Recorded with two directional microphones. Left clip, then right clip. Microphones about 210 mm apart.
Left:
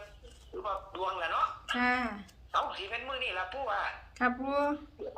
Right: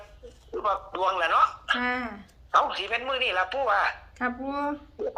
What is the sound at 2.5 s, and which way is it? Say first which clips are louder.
Speech: right 9 dB; 50° right (ahead or behind).